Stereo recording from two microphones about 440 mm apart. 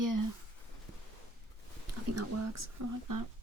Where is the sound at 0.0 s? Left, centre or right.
Right.